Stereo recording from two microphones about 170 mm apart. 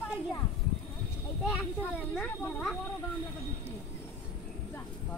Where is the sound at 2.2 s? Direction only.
5° left (ahead or behind).